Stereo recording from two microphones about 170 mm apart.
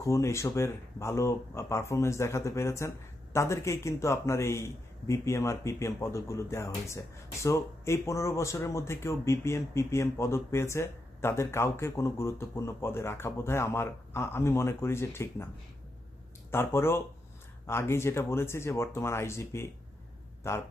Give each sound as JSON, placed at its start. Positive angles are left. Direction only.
{"t": 0.0, "sound": "speech", "side_deg": 15}
{"t": 16.5, "sound": "speech", "side_deg": 15}